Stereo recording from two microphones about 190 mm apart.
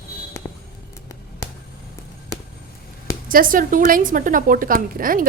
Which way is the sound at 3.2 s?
45° right (ahead or behind).